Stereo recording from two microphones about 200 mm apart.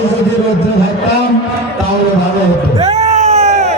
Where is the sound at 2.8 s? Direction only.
35° right (ahead or behind).